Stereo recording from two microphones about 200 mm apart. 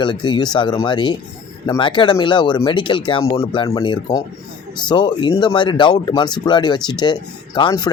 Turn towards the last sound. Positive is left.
turn(degrees=20)  # may be behind; listen again after turning